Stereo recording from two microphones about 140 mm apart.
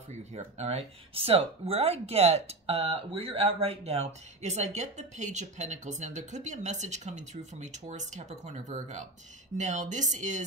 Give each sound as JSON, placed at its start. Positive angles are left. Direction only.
{"t": 0.3, "sound": "speech", "side_deg": -50}